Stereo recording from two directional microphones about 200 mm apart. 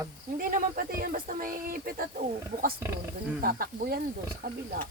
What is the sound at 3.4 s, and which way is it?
Speech, 50° right (ahead or behind).